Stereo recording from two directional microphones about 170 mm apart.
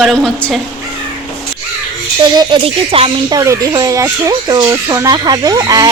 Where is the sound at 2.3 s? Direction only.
30° right (ahead or behind).